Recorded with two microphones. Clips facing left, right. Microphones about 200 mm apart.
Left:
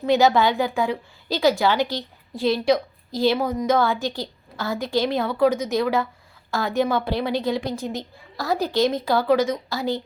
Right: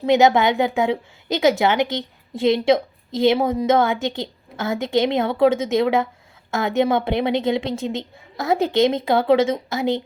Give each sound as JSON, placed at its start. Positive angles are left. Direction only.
{"t": 0.0, "sound": "a woman's voice", "side_deg": -20}